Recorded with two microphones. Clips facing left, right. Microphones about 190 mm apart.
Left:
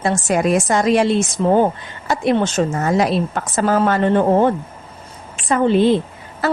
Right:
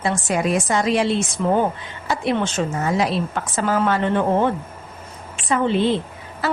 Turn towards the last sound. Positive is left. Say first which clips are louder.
# left 4 dB
turn(degrees=45)  # may be behind; listen again after turning